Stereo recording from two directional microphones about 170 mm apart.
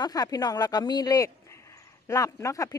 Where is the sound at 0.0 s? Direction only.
20° left (ahead or behind).